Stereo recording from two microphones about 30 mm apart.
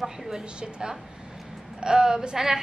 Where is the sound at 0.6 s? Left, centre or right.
Right.